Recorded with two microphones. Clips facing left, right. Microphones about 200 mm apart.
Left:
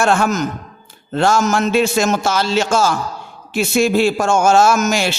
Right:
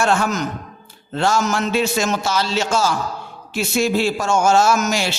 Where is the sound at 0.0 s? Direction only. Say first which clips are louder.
Left 3 dB; 50° left (ahead or behind).